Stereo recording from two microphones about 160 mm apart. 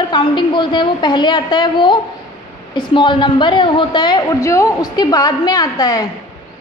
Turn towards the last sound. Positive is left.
turn(degrees=25)  # may be behind; listen again after turning